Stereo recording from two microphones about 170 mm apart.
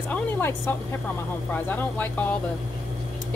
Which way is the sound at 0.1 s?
10° left (ahead or behind).